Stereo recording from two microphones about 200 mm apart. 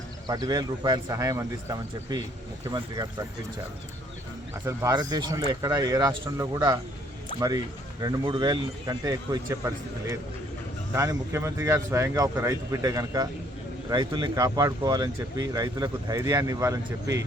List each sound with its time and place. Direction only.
0.3 s speech: 20° right (ahead or behind)
4.6 s speech: 20° right (ahead or behind)